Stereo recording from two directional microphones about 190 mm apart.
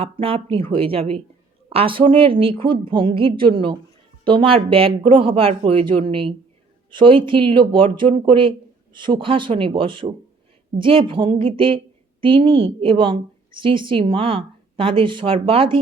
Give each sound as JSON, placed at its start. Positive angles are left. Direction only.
{"t": 0.0, "sound": "speech", "side_deg": -30}